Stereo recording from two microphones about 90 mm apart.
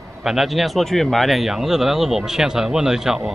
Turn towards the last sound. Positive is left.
turn(degrees=-5)  # may be behind; listen again after turning